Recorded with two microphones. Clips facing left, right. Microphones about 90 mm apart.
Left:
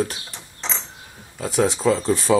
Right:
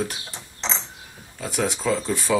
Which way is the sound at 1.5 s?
35° left (ahead or behind).